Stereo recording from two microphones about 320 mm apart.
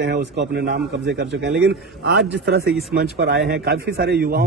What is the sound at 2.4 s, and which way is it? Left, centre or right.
A man's voice, right.